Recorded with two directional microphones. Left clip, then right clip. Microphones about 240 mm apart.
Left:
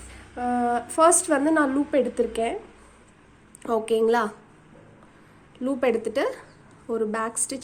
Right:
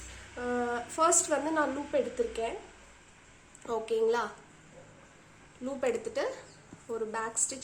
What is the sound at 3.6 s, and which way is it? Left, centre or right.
Speech, left.